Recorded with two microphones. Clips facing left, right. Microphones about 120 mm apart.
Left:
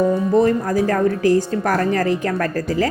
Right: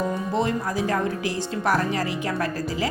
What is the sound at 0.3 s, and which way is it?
Speech, 45° left (ahead or behind).